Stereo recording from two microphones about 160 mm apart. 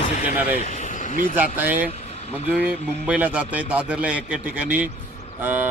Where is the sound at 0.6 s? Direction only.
50° left (ahead or behind).